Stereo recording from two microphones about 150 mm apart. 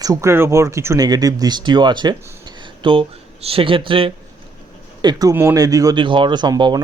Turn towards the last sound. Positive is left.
turn(degrees=-30)  # may be behind; listen again after turning